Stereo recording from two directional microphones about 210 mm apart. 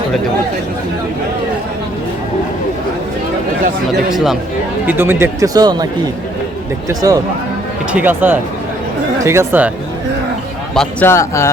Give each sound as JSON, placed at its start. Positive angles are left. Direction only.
{"t": 4.1, "sound": "speech", "side_deg": 0}
{"t": 10.8, "sound": "a man's voice", "side_deg": 10}